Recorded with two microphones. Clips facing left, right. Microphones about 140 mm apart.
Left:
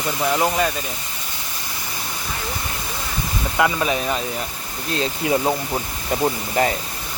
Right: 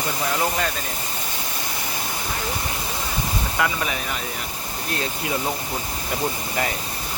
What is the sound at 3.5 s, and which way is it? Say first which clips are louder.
Speech: left 6 dB; 20° left (ahead or behind).